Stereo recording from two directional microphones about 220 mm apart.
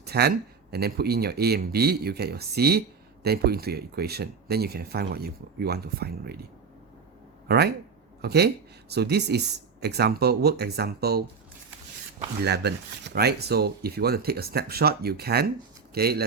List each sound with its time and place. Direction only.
0.0 s speech: 45° right (ahead or behind)
7.4 s speech: 45° right (ahead or behind)
12.4 s speech: 50° right (ahead or behind)